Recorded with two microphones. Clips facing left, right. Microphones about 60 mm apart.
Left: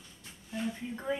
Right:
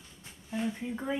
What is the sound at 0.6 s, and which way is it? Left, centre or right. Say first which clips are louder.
Speech: right 2 dB; centre.